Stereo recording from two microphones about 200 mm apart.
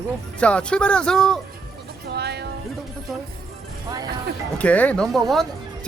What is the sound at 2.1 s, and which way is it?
Music, 55° right (ahead or behind).